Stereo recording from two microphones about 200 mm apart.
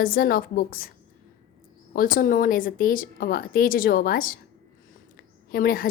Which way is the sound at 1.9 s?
45° left (ahead or behind).